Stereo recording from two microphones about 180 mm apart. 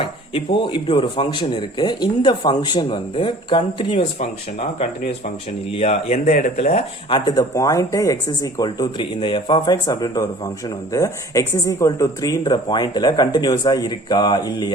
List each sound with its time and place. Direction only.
0.0 s speech: 25° left (ahead or behind)
5.7 s speech: 35° left (ahead or behind)
7.3 s speech: 20° left (ahead or behind)